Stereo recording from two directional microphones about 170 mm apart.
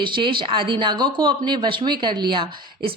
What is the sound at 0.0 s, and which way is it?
A woman's voice, 30° right (ahead or behind).